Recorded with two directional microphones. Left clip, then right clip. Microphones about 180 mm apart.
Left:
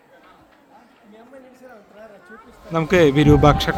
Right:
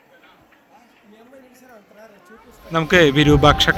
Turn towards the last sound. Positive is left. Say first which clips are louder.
# right 1 dB
turn(degrees=10)  # may be behind; listen again after turning